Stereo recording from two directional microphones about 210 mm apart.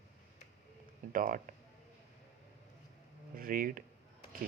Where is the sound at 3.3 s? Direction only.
40° right (ahead or behind).